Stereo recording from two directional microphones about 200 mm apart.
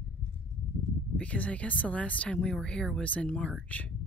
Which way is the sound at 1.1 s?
5° left (ahead or behind).